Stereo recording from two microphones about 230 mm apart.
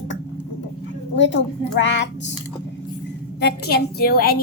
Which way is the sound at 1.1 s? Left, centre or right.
Left.